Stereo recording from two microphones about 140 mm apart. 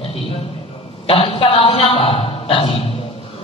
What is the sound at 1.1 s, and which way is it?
A man's voice, 40° left (ahead or behind).